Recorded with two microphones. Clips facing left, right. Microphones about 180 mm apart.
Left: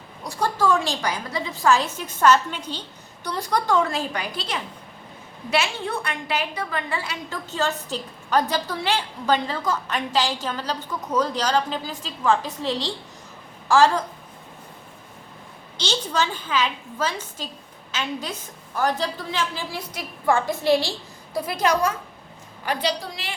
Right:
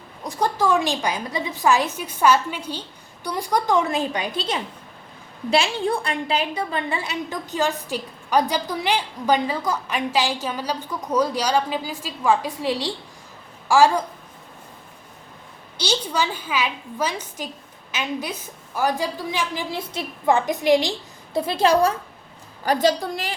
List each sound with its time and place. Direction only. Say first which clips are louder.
0.3 s a woman's voice: right 1 dB; 15° right (ahead or behind)
15.8 s a woman's voice: right 1 dB; 10° right (ahead or behind)
19.7 s a woman's voice: right 4 dB; 25° right (ahead or behind)
21.3 s a woman's voice: right 4 dB; 25° right (ahead or behind); by 23.3 s 45° right (ahead or behind)